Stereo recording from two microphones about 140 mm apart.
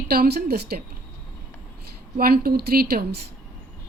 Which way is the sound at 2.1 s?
90° right.